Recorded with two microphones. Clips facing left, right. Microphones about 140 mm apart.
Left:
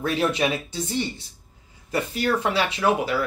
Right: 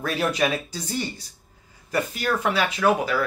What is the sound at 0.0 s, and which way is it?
Speech, 30° left (ahead or behind).